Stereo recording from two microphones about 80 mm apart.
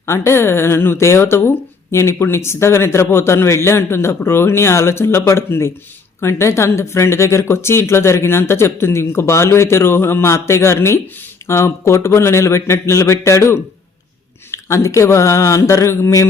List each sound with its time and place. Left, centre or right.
0.0 s speech: left